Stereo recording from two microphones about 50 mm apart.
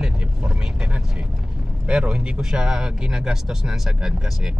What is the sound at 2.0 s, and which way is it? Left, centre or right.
A man's voice, right.